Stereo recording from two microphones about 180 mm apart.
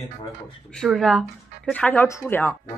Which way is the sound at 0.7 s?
Centre (ahead or behind).